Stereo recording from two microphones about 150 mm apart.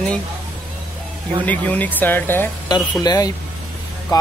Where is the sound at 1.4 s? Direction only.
10° left (ahead or behind).